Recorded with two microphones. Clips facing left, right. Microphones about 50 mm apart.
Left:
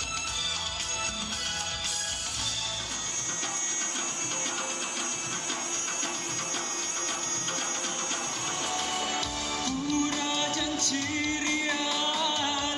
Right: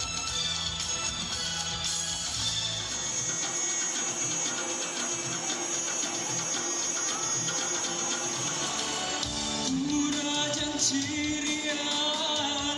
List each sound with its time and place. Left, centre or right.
9.7 s music: left